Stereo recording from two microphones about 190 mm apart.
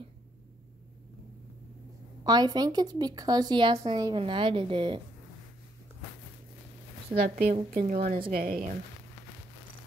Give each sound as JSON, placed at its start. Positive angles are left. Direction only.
{"t": 2.2, "sound": "a woman's voice", "side_deg": -20}
{"t": 7.2, "sound": "speech", "side_deg": -55}